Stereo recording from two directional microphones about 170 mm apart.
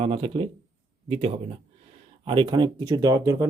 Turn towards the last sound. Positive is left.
turn(degrees=-20)  # may be behind; listen again after turning